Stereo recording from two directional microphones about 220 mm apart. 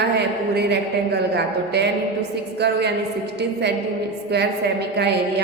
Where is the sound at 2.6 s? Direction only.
50° right (ahead or behind).